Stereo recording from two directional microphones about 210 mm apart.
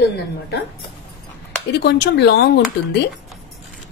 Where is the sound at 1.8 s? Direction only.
50° left (ahead or behind).